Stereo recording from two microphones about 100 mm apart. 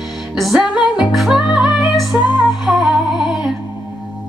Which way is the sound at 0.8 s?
45° left (ahead or behind).